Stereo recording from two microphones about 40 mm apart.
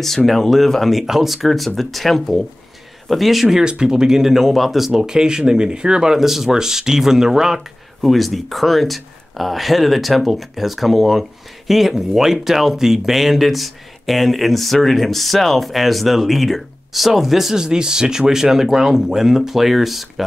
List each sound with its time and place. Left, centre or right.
0.0 s speech: centre
3.6 s speech: right; by 5.0 s centre
5.0 s speech: centre
6.1 s speech: centre
8.0 s speech: centre
17.6 s speech: centre